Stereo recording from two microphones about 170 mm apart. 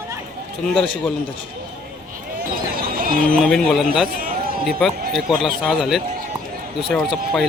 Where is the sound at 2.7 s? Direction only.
55° right (ahead or behind).